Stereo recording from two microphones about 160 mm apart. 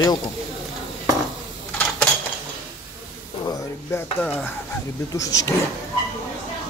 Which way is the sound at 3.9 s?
20° left (ahead or behind).